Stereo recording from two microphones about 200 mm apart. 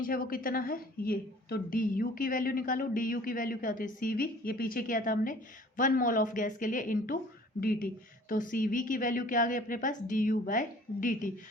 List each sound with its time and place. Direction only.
0.0 s a woman's voice: 45° left (ahead or behind)